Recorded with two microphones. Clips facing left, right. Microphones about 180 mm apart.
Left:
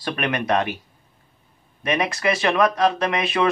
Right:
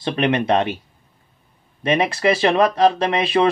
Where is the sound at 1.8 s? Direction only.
30° right (ahead or behind).